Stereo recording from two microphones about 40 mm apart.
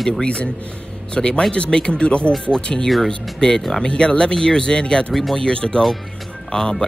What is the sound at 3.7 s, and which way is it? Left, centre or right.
Speech, left.